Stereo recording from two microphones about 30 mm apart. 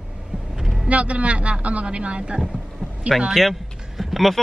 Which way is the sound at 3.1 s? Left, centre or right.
Centre.